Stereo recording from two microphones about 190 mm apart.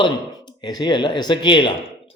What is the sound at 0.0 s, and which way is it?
Speech, 25° left (ahead or behind).